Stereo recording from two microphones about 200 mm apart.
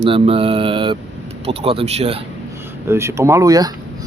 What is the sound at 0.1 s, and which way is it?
Speech, 25° right (ahead or behind).